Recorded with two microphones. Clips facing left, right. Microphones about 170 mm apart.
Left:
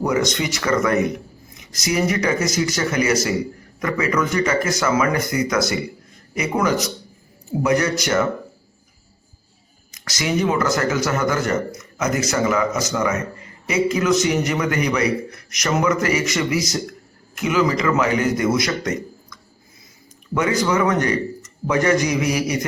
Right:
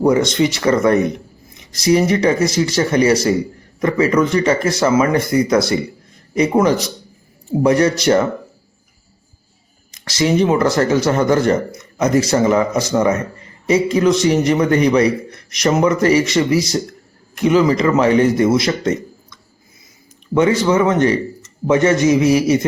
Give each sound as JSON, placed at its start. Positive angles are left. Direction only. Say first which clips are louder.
{"t": 0.0, "sound": "a man's voice", "louder": "right 7 dB", "side_deg": -30}
{"t": 9.9, "sound": "a man's voice", "louder": "right 6 dB", "side_deg": -30}